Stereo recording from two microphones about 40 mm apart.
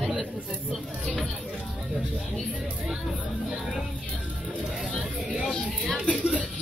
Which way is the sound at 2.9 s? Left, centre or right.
Centre.